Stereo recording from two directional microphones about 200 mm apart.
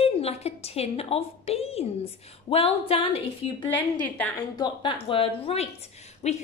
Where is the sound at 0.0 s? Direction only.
30° left (ahead or behind).